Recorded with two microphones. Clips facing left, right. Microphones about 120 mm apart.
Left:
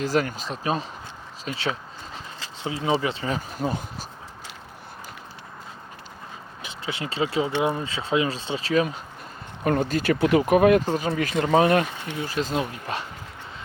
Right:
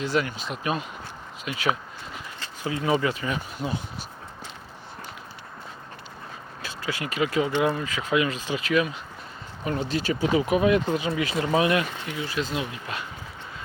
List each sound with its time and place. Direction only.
0.0 s speech: 40° left (ahead or behind)
6.6 s speech: 20° left (ahead or behind)
9.6 s speech: 50° left (ahead or behind)